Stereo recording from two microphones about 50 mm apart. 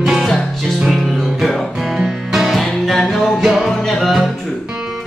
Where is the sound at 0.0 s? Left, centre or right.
Centre.